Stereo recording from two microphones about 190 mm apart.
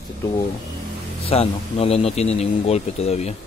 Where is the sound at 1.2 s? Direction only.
30° left (ahead or behind).